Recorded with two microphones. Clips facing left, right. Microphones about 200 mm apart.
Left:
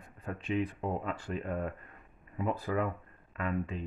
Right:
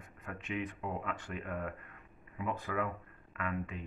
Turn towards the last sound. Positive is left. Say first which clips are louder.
# left 4 dB
turn(degrees=30)  # may be behind; listen again after turning